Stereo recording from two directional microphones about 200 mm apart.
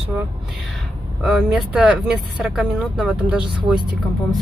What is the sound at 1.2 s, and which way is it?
Speech, centre (ahead or behind).